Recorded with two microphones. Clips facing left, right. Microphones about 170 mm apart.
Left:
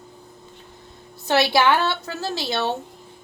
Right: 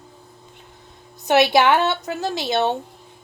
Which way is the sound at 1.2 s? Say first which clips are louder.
Right 3 dB; 20° right (ahead or behind).